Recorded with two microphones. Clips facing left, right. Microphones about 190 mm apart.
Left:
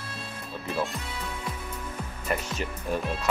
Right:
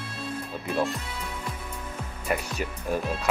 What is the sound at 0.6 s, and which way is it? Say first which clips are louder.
Speech: right 3 dB; centre (ahead or behind).